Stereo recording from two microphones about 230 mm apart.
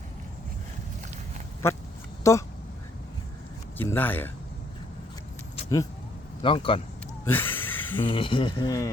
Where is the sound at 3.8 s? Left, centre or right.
Centre.